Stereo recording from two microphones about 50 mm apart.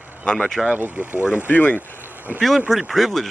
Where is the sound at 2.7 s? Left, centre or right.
Centre.